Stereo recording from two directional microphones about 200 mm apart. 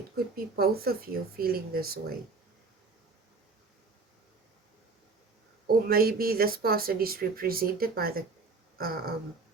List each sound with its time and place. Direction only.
0.3 s speech: 50° right (ahead or behind)
5.6 s speech: 50° right (ahead or behind)